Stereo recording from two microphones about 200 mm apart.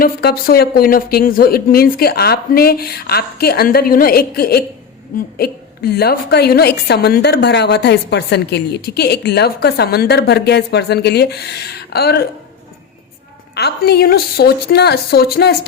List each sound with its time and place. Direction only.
0.0 s a woman's voice: 50° left (ahead or behind)
13.5 s speech: 55° left (ahead or behind)